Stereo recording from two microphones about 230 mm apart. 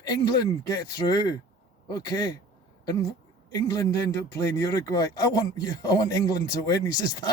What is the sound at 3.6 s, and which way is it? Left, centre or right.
Speech, centre.